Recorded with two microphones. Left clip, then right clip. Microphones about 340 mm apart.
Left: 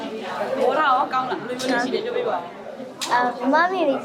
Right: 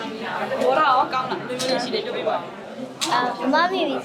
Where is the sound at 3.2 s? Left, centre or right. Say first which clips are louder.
Left 1 dB; centre.